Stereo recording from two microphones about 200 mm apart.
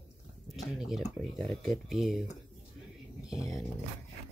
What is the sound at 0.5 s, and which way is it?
Speech, centre (ahead or behind).